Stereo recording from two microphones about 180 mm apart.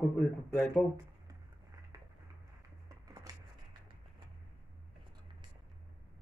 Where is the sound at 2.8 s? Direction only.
20° right (ahead or behind).